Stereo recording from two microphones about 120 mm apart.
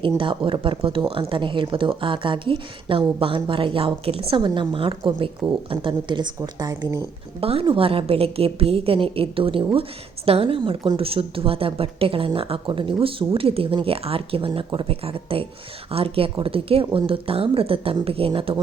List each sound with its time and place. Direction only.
0.0 s a woman's voice: 45° right (ahead or behind)
7.4 s a woman's voice: 50° right (ahead or behind)